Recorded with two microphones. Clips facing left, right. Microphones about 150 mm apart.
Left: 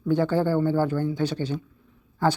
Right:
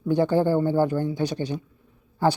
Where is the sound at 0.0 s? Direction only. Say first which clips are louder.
Right 2 dB; 15° right (ahead or behind).